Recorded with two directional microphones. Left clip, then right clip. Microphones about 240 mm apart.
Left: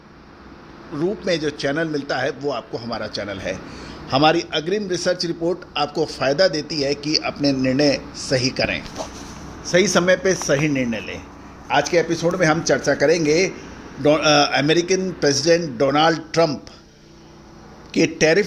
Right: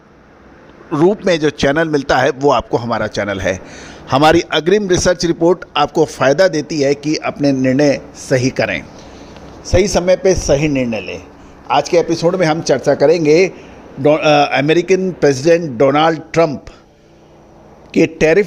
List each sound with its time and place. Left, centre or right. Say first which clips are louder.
0.9 s a man's voice: right 9 dB; right
9.6 s a man's voice: right 4 dB; centre
17.9 s a man's voice: right 5 dB; right